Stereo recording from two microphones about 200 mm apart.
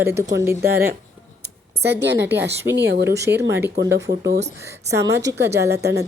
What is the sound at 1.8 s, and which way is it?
A woman's voice, 55° right (ahead or behind).